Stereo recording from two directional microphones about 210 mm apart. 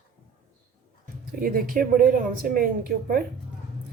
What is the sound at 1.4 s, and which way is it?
Speech, 45° right (ahead or behind).